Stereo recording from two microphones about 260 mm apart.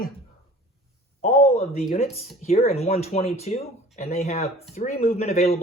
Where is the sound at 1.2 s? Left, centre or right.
Left.